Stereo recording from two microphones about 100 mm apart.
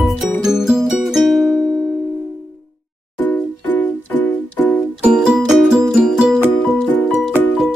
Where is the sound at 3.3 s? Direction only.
20° left (ahead or behind).